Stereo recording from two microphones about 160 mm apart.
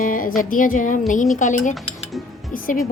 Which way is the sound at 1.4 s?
50° left (ahead or behind).